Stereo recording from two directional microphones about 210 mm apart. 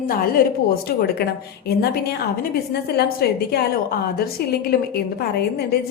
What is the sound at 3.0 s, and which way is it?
Speech, 50° left (ahead or behind).